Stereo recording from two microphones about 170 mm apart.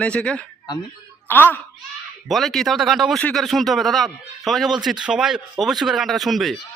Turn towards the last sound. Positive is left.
turn(degrees=0)  # may be behind; listen again after turning